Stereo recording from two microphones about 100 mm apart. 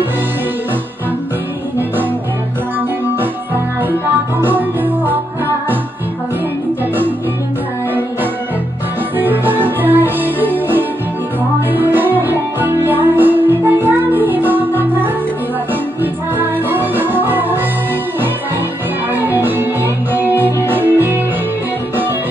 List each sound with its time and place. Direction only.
4.4 s music: 20° right (ahead or behind)
9.2 s music: 20° right (ahead or behind)
19.1 s music: 20° right (ahead or behind)